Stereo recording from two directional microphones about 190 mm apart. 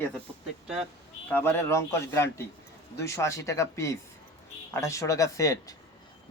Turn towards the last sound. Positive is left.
turn(degrees=15)  # may be behind; listen again after turning